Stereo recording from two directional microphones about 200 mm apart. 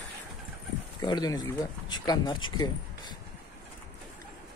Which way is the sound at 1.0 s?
20° left (ahead or behind).